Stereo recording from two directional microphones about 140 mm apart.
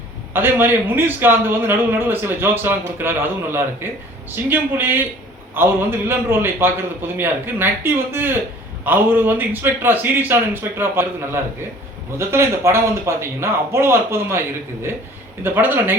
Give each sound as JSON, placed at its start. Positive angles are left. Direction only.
{"t": 0.3, "sound": "a man's voice", "side_deg": -15}